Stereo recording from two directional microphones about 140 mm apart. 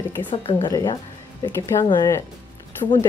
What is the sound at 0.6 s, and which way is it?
Speech, 25° left (ahead or behind).